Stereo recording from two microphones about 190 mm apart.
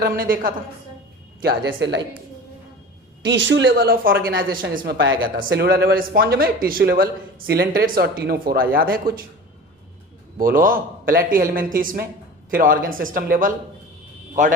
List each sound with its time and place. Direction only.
0.0 s speech: 50° right (ahead or behind)
1.4 s speech: 60° right (ahead or behind)
3.2 s speech: 70° right (ahead or behind); by 9.2 s 50° right (ahead or behind)
10.3 s speech: 50° right (ahead or behind)